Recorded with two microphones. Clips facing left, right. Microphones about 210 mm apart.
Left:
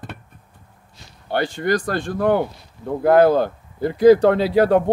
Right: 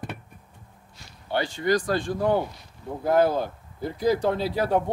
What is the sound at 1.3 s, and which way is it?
Speech, 60° left (ahead or behind).